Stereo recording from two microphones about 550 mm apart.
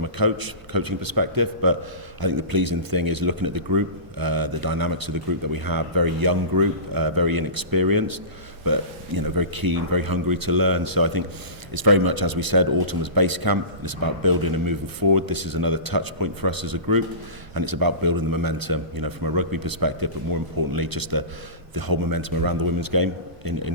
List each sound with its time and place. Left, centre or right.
0.0 s speech: right